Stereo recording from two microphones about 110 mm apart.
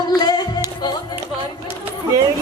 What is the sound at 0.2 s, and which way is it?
Music, 40° left (ahead or behind).